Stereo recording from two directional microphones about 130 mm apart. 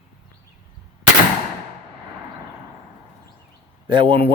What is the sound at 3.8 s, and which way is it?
Speech, 40° right (ahead or behind).